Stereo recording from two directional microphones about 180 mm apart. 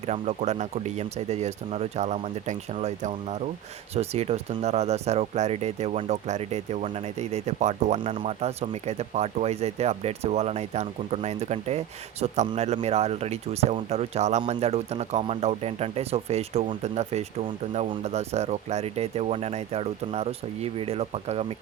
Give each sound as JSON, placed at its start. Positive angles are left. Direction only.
{"t": 0.1, "sound": "speech", "side_deg": -40}